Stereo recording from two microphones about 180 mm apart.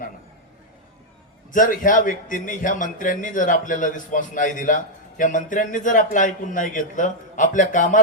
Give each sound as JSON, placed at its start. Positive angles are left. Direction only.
{"t": 1.5, "sound": "a man's voice", "side_deg": 50}